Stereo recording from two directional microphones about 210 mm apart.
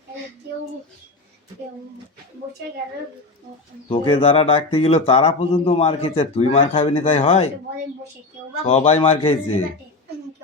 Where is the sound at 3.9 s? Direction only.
25° left (ahead or behind).